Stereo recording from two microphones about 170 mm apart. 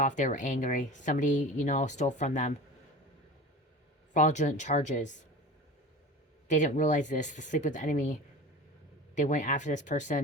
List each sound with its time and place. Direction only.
0.0 s speech: 45° left (ahead or behind)
4.1 s speech: 45° left (ahead or behind)
6.5 s speech: 45° left (ahead or behind)
9.1 s speech: 45° left (ahead or behind)